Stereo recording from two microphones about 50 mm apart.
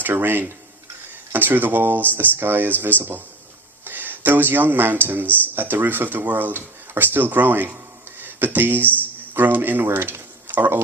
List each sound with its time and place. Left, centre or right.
0.0 s speech: right